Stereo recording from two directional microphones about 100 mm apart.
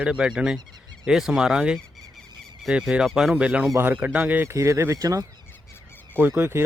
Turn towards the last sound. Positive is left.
turn(degrees=-25)  # may be behind; listen again after turning